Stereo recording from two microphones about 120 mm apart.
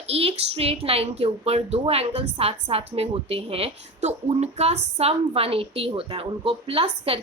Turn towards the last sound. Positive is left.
turn(degrees=-50)  # may be behind; listen again after turning